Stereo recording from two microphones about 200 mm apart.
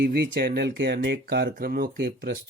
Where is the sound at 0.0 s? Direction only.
50° right (ahead or behind).